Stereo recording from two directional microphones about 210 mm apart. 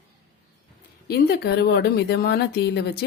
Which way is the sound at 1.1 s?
50° left (ahead or behind).